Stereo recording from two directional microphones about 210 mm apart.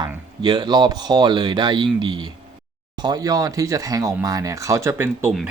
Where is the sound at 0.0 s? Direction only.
20° right (ahead or behind).